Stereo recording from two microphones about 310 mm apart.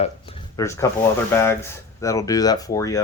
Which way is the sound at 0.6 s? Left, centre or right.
Centre.